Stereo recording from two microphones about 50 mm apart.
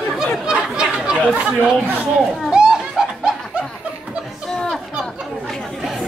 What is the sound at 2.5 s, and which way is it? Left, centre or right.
Children playing, centre.